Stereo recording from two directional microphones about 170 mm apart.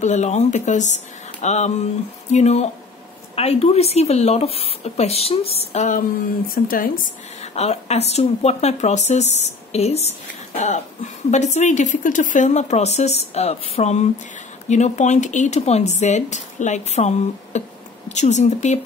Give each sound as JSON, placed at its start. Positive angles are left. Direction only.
{"t": 0.0, "sound": "speech", "side_deg": 40}
{"t": 6.5, "sound": "speech", "side_deg": 55}
{"t": 7.5, "sound": "speech", "side_deg": 40}